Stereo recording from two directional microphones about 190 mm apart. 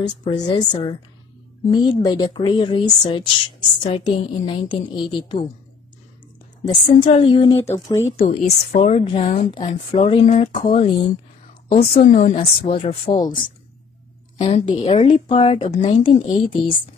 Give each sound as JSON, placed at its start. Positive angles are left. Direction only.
{"t": 0.2, "sound": "a woman's voice", "side_deg": 25}
{"t": 6.6, "sound": "a woman's voice", "side_deg": 30}
{"t": 11.7, "sound": "a woman's voice", "side_deg": 40}
{"t": 12.4, "sound": "a woman's voice", "side_deg": 30}
{"t": 14.4, "sound": "a woman's voice", "side_deg": 30}